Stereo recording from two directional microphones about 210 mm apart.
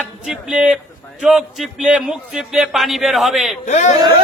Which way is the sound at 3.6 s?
35° left (ahead or behind).